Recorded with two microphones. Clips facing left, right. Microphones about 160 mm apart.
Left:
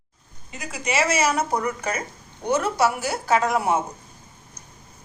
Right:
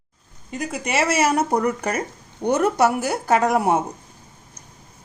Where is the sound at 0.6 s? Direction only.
55° right (ahead or behind).